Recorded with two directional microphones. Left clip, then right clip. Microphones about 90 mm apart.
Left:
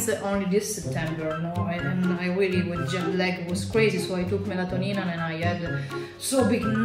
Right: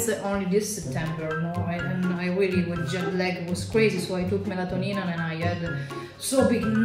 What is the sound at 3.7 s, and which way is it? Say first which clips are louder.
Speech: even; 20° right (ahead or behind).